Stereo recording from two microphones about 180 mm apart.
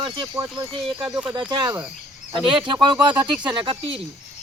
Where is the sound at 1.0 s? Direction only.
10° right (ahead or behind).